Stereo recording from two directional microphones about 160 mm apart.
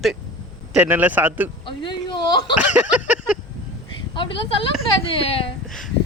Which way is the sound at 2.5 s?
10° right (ahead or behind).